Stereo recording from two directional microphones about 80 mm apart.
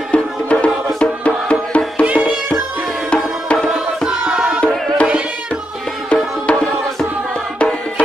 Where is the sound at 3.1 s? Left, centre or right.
Centre.